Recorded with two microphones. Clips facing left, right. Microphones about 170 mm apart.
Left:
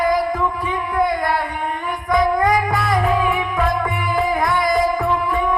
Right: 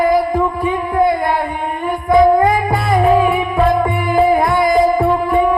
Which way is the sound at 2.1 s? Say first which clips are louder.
Right 6 dB; 30° right (ahead or behind).